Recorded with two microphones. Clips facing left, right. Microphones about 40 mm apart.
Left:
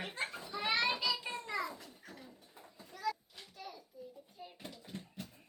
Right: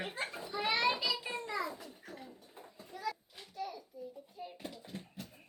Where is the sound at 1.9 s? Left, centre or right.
Centre.